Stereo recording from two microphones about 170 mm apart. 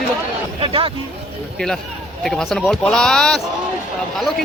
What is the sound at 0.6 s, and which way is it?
Speech, 30° right (ahead or behind).